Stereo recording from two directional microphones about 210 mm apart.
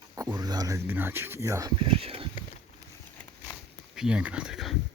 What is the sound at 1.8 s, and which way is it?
Speech, 25° right (ahead or behind).